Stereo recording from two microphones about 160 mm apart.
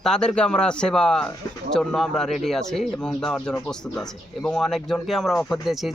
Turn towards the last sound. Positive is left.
turn(degrees=0)  # may be behind; listen again after turning